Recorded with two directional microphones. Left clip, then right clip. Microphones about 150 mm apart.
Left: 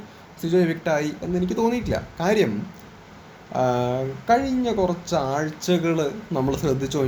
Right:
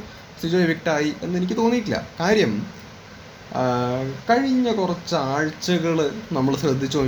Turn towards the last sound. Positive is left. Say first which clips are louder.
# right 2 dB
turn(degrees=20)  # may be behind; listen again after turning